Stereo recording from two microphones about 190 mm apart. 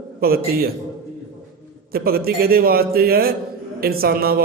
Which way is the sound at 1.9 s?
55° right (ahead or behind).